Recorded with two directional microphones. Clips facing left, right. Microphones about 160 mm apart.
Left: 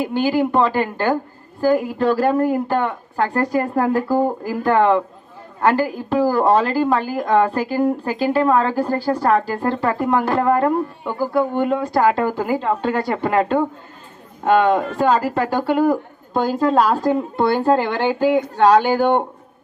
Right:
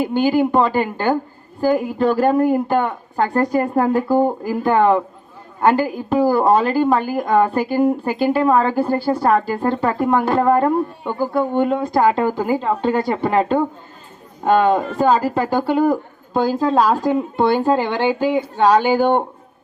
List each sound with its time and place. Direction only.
0.0 s speech: 15° right (ahead or behind)
10.1 s speech: 5° right (ahead or behind)
10.6 s speech: 20° right (ahead or behind)
14.8 s speech: centre (ahead or behind)
15.5 s speech: 10° right (ahead or behind)
17.3 s speech: 15° right (ahead or behind)